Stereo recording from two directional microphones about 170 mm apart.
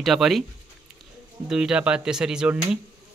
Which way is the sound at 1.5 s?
5° right (ahead or behind).